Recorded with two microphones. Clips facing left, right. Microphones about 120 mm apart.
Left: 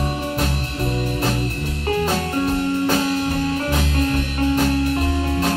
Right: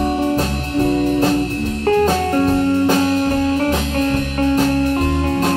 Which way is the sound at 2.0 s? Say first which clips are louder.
Right 5 dB; 40° right (ahead or behind).